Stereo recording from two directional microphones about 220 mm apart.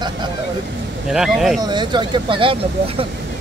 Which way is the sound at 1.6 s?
20° right (ahead or behind).